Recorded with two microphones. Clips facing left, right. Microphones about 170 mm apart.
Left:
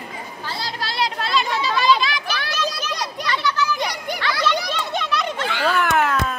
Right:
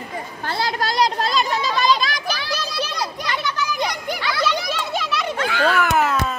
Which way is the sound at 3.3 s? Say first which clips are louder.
Left 5 dB; 20° right (ahead or behind).